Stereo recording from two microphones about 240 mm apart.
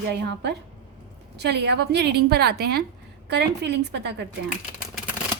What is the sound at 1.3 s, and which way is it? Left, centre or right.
A woman's voice, right.